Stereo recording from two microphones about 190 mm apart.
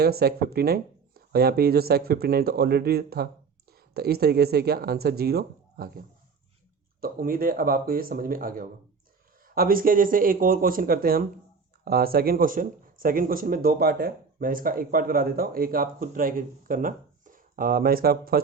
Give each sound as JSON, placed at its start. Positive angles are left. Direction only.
{"t": 0.0, "sound": "speech", "side_deg": -55}